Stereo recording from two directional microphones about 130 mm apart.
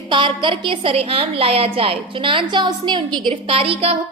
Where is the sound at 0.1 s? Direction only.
40° right (ahead or behind).